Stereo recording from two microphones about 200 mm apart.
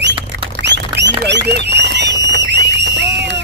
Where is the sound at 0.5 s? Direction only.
60° right (ahead or behind).